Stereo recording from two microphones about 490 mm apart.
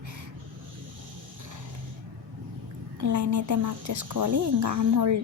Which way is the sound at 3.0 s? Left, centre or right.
Right.